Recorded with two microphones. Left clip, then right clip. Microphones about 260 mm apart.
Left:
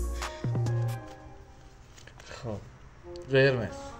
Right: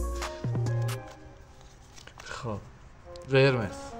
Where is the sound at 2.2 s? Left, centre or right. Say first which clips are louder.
Right 3 dB; right.